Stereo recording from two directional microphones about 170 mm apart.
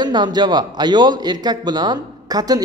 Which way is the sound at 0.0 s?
25° right (ahead or behind).